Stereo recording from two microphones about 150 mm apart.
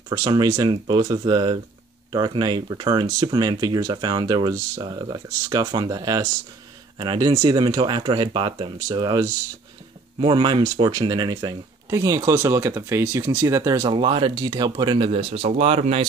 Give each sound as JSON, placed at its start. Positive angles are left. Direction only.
{"t": 0.1, "sound": "speech", "side_deg": -25}